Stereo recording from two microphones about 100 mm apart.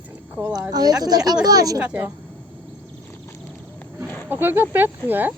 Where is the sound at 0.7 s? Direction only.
40° right (ahead or behind).